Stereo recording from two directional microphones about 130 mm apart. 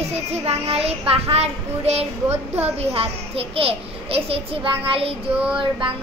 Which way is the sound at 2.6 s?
50° right (ahead or behind).